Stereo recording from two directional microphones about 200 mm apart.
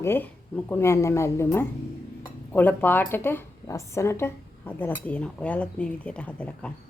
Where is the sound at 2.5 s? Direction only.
10° left (ahead or behind).